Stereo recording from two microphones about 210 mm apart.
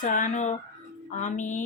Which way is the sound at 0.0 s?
40° left (ahead or behind).